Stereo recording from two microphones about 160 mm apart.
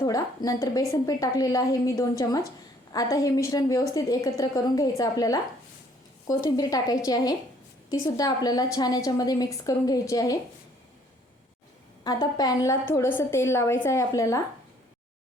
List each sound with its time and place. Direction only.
0.0 s a woman's voice: 20° left (ahead or behind)
12.0 s a woman's voice: 25° left (ahead or behind)